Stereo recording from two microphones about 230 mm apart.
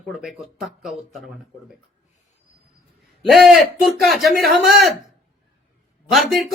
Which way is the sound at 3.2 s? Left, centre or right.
Centre.